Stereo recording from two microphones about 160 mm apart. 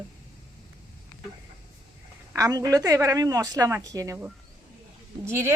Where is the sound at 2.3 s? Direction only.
25° right (ahead or behind).